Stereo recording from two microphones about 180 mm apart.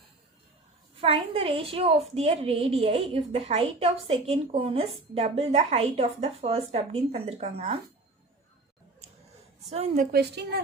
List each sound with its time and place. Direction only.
1.0 s a woman's voice: 30° right (ahead or behind)
9.6 s a woman's voice: 40° right (ahead or behind)
10.1 s a woman's voice: 65° right (ahead or behind)